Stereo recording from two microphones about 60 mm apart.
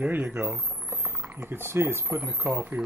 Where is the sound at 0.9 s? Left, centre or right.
Right.